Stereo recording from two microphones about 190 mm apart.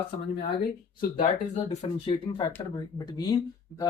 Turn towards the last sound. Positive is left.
turn(degrees=20)  # may be behind; listen again after turning